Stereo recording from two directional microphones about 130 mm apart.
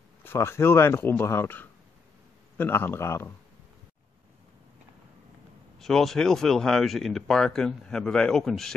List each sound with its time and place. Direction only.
0.2 s speech: 20° left (ahead or behind)
5.8 s speech: centre (ahead or behind)